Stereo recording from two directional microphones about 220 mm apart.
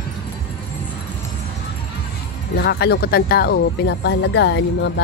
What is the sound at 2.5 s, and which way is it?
Speech, 50° left (ahead or behind).